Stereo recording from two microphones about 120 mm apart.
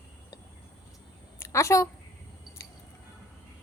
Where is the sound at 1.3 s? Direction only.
25° left (ahead or behind).